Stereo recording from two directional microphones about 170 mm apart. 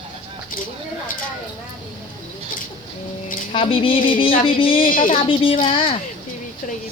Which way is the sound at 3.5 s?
30° left (ahead or behind).